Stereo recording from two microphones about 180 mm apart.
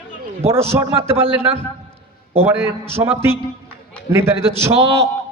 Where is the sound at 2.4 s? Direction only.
10° right (ahead or behind).